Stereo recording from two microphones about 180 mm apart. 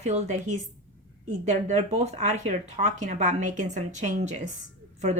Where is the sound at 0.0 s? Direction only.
40° right (ahead or behind).